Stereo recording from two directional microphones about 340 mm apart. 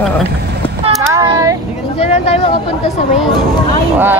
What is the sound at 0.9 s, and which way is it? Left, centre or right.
Child singing, centre.